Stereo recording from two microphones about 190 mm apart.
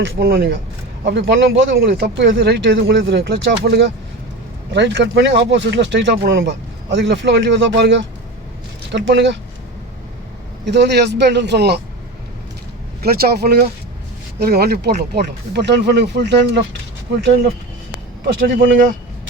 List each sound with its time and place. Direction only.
0.0 s speech: 60° right (ahead or behind)
10.7 s speech: 65° right (ahead or behind)
13.0 s speech: 55° right (ahead or behind)
18.4 s speech: 80° right